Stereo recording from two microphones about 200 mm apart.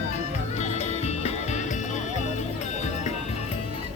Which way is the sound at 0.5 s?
35° left (ahead or behind).